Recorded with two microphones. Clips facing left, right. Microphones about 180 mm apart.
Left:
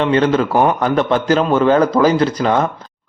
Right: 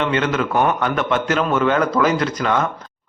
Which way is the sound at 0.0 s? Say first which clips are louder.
Left 6 dB; 35° left (ahead or behind).